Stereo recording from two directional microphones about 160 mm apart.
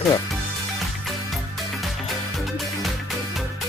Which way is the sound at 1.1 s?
Centre (ahead or behind).